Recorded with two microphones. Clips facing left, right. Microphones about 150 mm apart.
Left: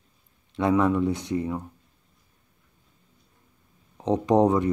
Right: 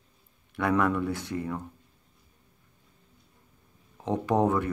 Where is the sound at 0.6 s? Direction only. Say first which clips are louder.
Left 4 dB; 20° left (ahead or behind).